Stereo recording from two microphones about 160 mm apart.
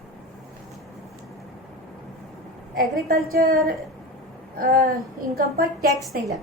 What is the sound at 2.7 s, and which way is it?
A woman's voice, 65° right (ahead or behind).